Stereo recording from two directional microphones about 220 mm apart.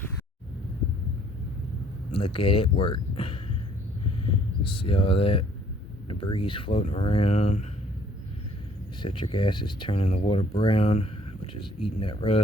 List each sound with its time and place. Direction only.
2.1 s speech: 25° left (ahead or behind)
4.6 s speech: 25° left (ahead or behind)
9.0 s speech: 20° left (ahead or behind)